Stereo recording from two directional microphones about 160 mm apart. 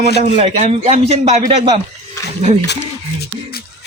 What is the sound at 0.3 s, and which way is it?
A man's voice, 45° right (ahead or behind).